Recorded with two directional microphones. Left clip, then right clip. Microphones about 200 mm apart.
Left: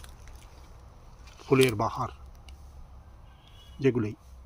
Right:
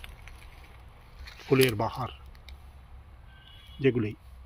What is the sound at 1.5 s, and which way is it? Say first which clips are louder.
Speech: left 1 dB; 5° right (ahead or behind).